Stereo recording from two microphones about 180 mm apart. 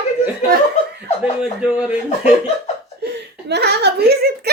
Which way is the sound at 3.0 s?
65° right (ahead or behind).